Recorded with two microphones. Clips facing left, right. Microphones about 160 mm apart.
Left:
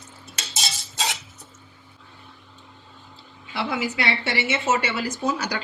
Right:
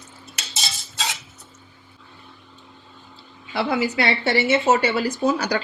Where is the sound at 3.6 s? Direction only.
40° right (ahead or behind).